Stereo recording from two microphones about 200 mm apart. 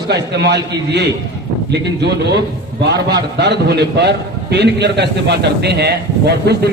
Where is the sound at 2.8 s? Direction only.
55° right (ahead or behind).